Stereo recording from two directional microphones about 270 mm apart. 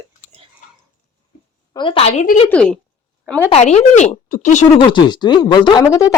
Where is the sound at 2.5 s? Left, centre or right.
Centre.